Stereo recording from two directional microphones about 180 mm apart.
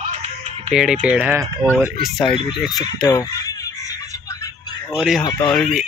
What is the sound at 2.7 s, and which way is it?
Speech, 20° left (ahead or behind).